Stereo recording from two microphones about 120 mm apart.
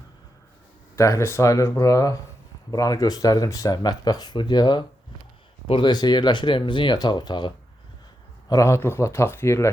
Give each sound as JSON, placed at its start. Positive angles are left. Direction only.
{"t": 0.9, "sound": "speech", "side_deg": 25}
{"t": 8.4, "sound": "speech", "side_deg": 25}